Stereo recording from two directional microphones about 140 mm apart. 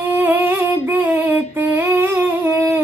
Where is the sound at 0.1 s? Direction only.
15° right (ahead or behind).